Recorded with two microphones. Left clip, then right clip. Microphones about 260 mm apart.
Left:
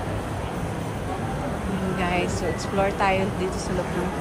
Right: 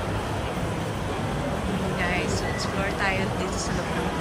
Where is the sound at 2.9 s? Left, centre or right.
Centre.